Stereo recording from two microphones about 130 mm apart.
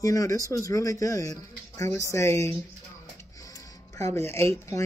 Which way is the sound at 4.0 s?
20° left (ahead or behind).